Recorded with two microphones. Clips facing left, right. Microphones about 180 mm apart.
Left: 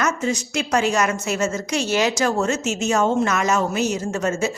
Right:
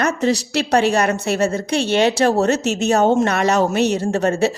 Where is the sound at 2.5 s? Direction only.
65° right (ahead or behind).